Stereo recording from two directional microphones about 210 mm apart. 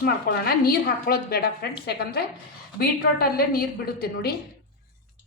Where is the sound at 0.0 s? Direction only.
45° left (ahead or behind).